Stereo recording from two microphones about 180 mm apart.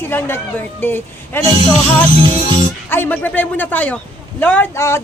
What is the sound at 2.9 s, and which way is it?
A man's voice, 10° left (ahead or behind).